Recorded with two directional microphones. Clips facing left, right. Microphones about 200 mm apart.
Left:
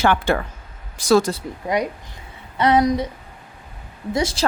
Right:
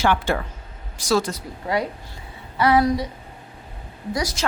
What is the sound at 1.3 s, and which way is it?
Speech, 20° left (ahead or behind).